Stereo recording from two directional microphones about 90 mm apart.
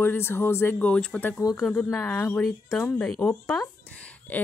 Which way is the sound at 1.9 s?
25° left (ahead or behind).